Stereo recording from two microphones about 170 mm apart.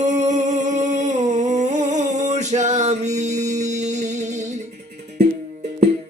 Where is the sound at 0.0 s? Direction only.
45° right (ahead or behind).